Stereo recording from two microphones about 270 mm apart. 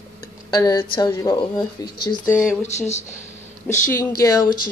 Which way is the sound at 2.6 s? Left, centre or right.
Left.